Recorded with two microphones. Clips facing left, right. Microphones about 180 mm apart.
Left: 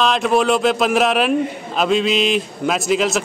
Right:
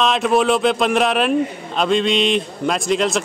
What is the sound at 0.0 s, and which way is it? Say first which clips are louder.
A man's voice: even; centre (ahead or behind).